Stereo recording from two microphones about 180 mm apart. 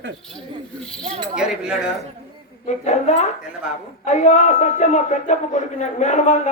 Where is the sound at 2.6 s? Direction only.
40° left (ahead or behind).